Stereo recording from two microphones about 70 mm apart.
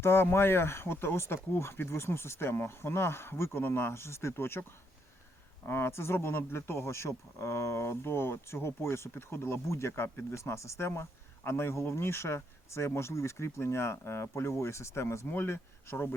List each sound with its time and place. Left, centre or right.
0.0 s speech: left
5.6 s speech: left
15.3 s speech: left